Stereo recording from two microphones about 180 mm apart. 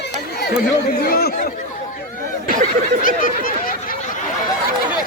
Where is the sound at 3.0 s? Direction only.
50° left (ahead or behind).